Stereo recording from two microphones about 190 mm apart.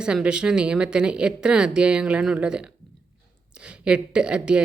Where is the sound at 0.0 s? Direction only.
5° right (ahead or behind).